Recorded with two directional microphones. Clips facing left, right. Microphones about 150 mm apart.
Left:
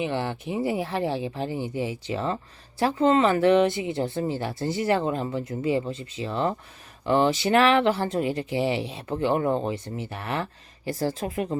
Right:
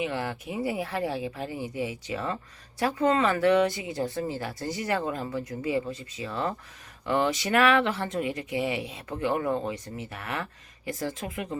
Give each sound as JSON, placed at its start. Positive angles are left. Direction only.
{"t": 0.0, "sound": "speech", "side_deg": 25}